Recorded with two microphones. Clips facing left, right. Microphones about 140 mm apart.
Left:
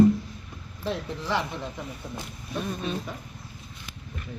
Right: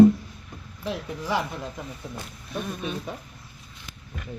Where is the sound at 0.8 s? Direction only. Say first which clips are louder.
Even; 10° right (ahead or behind).